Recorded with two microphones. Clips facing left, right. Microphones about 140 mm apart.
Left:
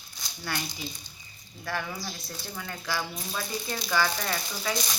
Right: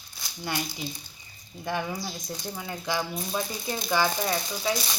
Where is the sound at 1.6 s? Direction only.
20° right (ahead or behind).